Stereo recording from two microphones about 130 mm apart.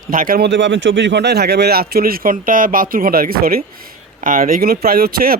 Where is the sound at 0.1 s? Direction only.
90° right.